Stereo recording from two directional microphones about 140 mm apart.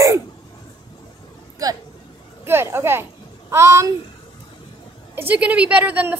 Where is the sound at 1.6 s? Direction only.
25° right (ahead or behind).